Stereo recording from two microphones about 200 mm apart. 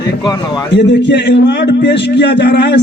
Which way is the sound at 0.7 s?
60° left (ahead or behind).